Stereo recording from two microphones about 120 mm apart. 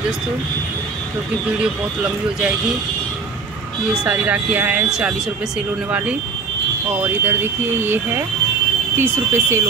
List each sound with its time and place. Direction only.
3.9 s speech: 10° right (ahead or behind)